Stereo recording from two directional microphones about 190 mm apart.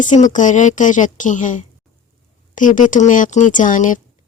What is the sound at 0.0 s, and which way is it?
A woman's voice, 40° left (ahead or behind).